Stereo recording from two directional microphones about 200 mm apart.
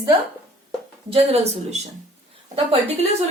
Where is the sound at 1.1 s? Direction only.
30° right (ahead or behind).